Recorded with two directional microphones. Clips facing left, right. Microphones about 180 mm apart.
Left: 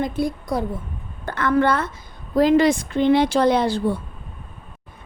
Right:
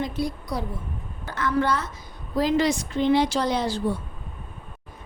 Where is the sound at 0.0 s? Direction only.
50° left (ahead or behind).